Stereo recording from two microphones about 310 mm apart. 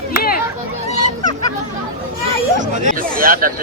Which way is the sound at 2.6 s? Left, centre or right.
Right.